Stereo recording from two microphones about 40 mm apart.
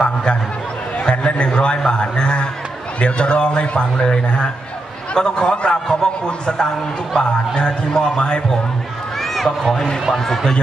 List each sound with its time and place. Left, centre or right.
0.0 s a sound: left
1.1 s a man's voice: left
9.3 s run: centre
9.7 s a man's voice: centre